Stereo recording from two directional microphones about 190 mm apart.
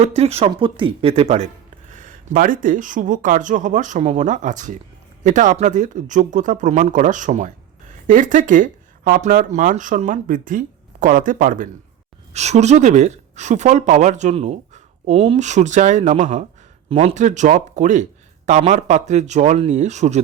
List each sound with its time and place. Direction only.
0.0 s speech: 35° right (ahead or behind)
1.9 s speech: 45° right (ahead or behind)